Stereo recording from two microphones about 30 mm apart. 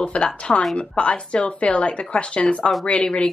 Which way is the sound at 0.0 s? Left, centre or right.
Left.